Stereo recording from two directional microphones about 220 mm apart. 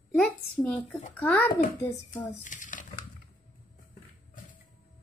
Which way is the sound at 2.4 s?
35° left (ahead or behind).